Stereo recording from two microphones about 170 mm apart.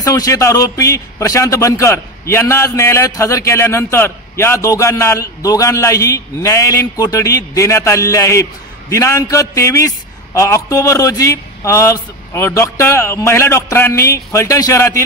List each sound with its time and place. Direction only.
0.0 s a man's voice: 20° left (ahead or behind)